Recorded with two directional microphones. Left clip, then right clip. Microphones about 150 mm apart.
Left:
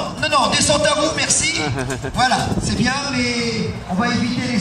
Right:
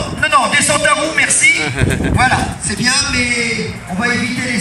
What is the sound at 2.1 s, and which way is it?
Speech, 45° left (ahead or behind).